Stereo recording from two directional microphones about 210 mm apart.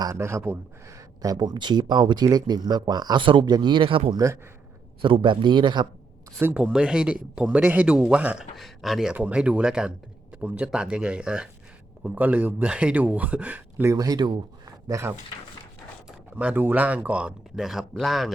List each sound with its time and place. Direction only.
0.0 s speech: 15° right (ahead or behind)
6.4 s speech: 5° right (ahead or behind)